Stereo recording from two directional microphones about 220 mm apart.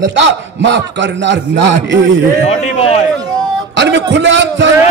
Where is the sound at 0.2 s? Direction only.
55° right (ahead or behind).